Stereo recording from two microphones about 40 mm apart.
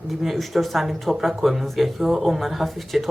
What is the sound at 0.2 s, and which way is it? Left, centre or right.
Speech, centre.